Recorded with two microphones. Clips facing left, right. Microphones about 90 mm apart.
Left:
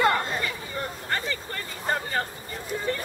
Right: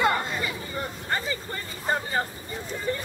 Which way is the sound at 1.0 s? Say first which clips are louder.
Right 2 dB; 10° right (ahead or behind).